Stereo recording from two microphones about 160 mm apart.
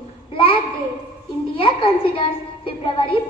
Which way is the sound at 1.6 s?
35° left (ahead or behind).